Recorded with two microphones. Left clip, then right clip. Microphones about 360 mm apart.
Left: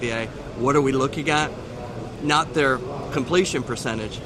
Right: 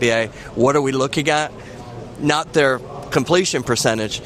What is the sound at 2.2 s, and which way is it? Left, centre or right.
Speech, right.